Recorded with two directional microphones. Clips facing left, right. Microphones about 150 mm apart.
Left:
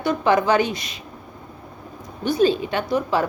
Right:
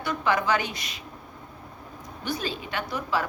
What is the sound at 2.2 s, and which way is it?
Speech, 25° left (ahead or behind).